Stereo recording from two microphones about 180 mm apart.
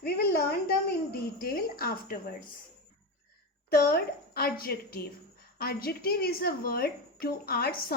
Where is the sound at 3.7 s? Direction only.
55° left (ahead or behind).